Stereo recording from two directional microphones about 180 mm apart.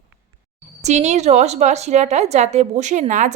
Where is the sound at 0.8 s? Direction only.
40° right (ahead or behind).